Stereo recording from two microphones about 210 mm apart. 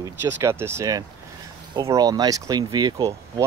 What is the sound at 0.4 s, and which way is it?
Speech, 10° right (ahead or behind).